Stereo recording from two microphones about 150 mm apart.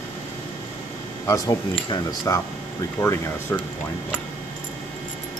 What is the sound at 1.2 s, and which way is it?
Speech, 20° left (ahead or behind).